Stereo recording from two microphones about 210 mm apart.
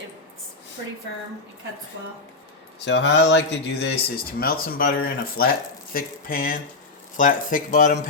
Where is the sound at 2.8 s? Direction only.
55° left (ahead or behind).